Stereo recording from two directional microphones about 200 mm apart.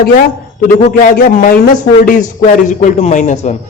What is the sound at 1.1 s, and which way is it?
A man's voice, 45° left (ahead or behind).